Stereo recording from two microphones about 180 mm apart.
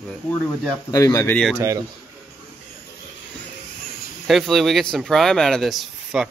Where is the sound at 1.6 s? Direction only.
20° right (ahead or behind).